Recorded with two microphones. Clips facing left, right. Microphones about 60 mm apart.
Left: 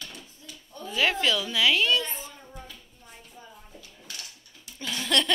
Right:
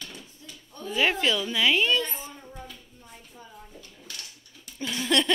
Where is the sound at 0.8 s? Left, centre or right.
Centre.